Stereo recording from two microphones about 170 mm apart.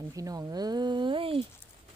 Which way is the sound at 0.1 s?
20° right (ahead or behind).